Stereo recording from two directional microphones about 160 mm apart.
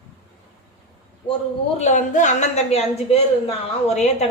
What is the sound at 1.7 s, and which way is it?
A woman's voice, 50° left (ahead or behind).